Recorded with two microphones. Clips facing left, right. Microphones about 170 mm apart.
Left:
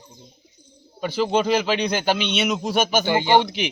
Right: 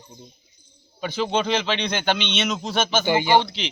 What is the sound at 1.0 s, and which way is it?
A man's voice, 5° left (ahead or behind).